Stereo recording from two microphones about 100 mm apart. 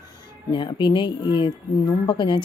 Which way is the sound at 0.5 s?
50° left (ahead or behind).